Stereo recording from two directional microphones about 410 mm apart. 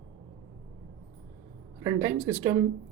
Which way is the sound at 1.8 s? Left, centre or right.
Centre.